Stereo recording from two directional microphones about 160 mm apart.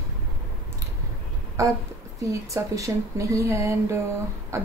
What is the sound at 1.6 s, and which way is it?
A woman's voice, 20° right (ahead or behind).